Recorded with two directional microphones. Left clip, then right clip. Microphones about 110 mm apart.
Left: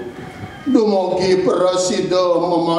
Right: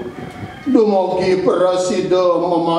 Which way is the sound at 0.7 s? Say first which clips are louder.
Right 2 dB; 20° left (ahead or behind).